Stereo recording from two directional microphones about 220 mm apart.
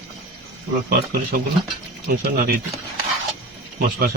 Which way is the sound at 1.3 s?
40° right (ahead or behind).